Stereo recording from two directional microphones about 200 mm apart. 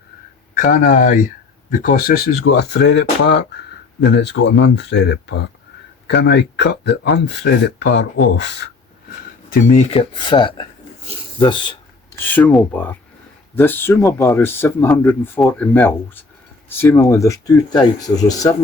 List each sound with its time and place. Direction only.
0.5 s speech: 45° left (ahead or behind); by 8.7 s 60° left (ahead or behind)
9.5 s speech: 40° left (ahead or behind); by 11.8 s 25° left (ahead or behind)
12.2 s speech: 10° left (ahead or behind)